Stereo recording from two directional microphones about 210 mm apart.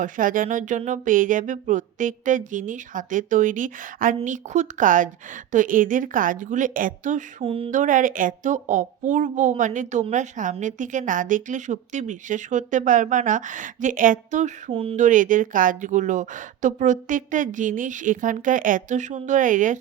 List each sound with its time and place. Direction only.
0.0 s a woman's voice: 40° right (ahead or behind)
7.4 s speech: 25° right (ahead or behind)
7.8 s a woman's voice: 40° right (ahead or behind)